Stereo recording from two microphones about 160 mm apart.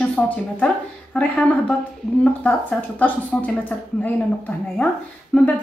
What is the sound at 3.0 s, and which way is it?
A woman's voice, 10° left (ahead or behind).